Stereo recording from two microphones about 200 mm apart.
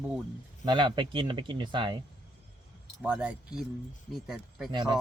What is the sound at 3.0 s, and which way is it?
Speech, 5° right (ahead or behind).